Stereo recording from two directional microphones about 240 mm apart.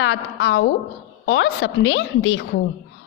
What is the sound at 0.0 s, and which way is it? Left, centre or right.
A woman's voice, left.